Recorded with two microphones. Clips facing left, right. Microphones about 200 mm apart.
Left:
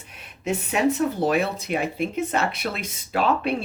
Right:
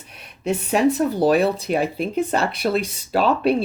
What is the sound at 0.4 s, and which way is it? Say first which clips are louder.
Speech: right 4 dB; 35° right (ahead or behind).